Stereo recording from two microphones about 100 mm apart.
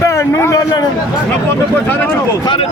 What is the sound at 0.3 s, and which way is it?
Speech, 35° left (ahead or behind).